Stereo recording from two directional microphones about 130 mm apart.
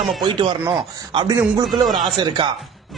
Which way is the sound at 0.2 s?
35° right (ahead or behind).